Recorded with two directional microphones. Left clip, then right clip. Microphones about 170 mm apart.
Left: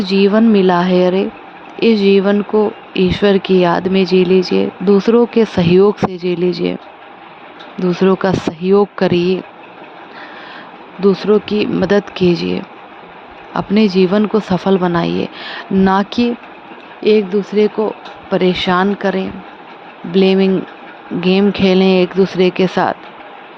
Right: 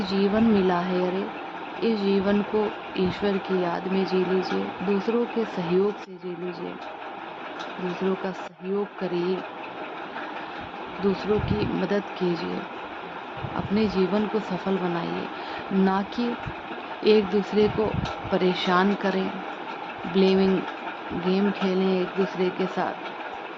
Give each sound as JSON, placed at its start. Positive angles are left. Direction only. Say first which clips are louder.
{"t": 0.0, "sound": "speech", "louder": "left 11 dB", "side_deg": 55}
{"t": 8.2, "sound": "speech", "louder": "left 16 dB", "side_deg": 70}
{"t": 11.0, "sound": "speech", "louder": "left 13 dB", "side_deg": 55}
{"t": 13.6, "sound": "speech", "louder": "left 12 dB", "side_deg": 60}
{"t": 17.0, "sound": "speech", "louder": "left 8 dB", "side_deg": 30}
{"t": 21.2, "sound": "speech", "louder": "left 13 dB", "side_deg": 60}